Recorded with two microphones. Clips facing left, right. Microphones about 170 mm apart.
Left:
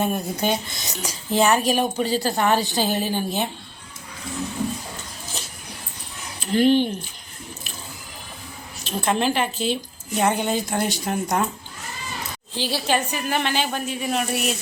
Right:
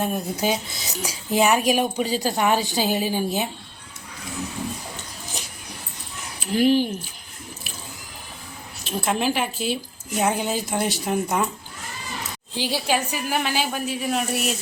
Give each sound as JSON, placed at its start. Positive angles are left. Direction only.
{"t": 0.0, "sound": "a woman's voice", "side_deg": 0}
{"t": 5.4, "sound": "a sound", "side_deg": -15}
{"t": 6.4, "sound": "a woman's voice", "side_deg": -5}
{"t": 8.8, "sound": "a woman's voice", "side_deg": -5}
{"t": 12.5, "sound": "a woman's voice", "side_deg": -15}